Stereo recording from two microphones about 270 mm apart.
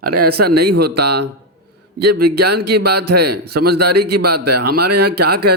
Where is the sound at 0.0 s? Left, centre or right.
Right.